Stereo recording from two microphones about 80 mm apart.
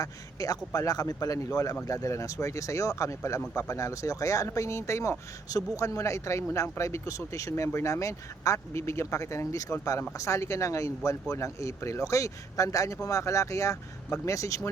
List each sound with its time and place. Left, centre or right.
0.0 s a man's voice: left